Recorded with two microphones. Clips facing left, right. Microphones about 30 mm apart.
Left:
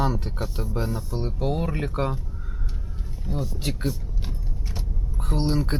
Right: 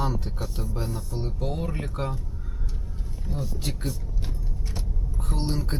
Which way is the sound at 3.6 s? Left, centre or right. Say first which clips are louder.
Left 4 dB; centre.